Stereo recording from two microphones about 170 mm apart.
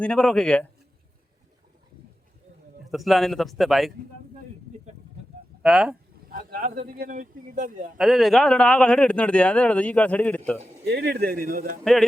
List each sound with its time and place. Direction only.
0.0 s speech: 5° left (ahead or behind)
2.9 s speech: centre (ahead or behind)
5.6 s speech: 5° right (ahead or behind)
6.2 s speech: 55° right (ahead or behind)
7.9 s a man's voice: centre (ahead or behind)
10.8 s speech: 70° right (ahead or behind); by 11.8 s 55° right (ahead or behind)